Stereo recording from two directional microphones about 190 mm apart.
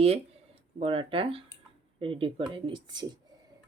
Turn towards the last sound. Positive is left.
turn(degrees=-25)  # may be behind; listen again after turning